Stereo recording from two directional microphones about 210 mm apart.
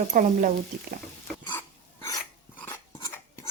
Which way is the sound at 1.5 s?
15° left (ahead or behind).